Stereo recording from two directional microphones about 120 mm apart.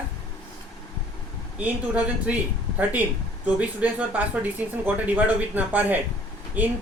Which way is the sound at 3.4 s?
10° right (ahead or behind).